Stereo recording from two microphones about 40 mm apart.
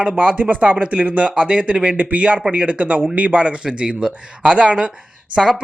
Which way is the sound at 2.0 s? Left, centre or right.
Right.